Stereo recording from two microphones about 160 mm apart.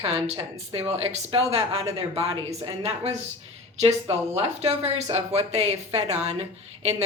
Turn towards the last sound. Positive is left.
turn(degrees=-40)  # may be behind; listen again after turning